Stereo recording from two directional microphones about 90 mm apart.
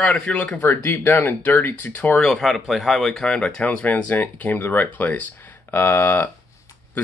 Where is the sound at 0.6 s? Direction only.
25° left (ahead or behind).